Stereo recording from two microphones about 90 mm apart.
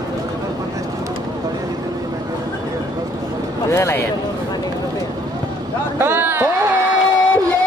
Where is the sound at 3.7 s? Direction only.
30° left (ahead or behind).